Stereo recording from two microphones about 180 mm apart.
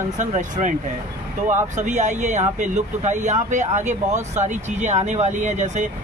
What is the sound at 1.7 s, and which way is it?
Speech, 40° right (ahead or behind).